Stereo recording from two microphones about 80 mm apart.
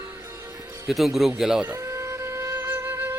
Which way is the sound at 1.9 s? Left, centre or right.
Right.